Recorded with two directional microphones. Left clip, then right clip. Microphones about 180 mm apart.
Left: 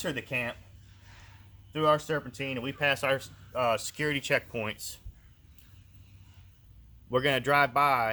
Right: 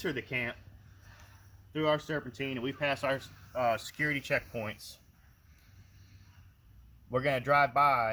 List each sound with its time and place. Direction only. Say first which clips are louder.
0.0 s speech: left 2 dB; 25° left (ahead or behind)
1.7 s speech: left 4 dB; 25° left (ahead or behind); by 4.8 s 50° left (ahead or behind)
7.1 s speech: left 2 dB; 55° left (ahead or behind)